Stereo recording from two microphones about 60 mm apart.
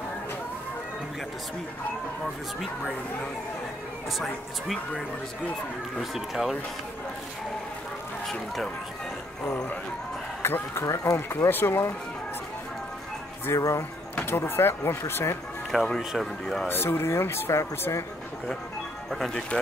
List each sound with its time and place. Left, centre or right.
6.1 s speech: centre
10.4 s speech: left
13.5 s speech: left
15.7 s speech: centre
16.0 s speech: centre
16.6 s speech: left
19.0 s speech: centre